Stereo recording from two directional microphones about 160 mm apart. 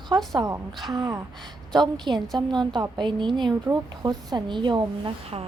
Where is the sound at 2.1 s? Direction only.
Centre (ahead or behind).